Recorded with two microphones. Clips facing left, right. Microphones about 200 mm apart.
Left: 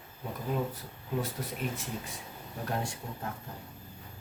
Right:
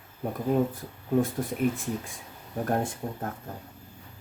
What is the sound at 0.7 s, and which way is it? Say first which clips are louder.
Speech: right 9 dB; 50° right (ahead or behind).